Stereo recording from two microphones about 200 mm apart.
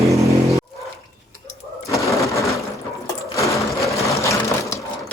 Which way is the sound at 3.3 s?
15° left (ahead or behind).